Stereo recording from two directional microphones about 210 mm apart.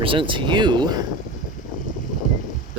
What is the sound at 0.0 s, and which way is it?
Speech, 25° right (ahead or behind).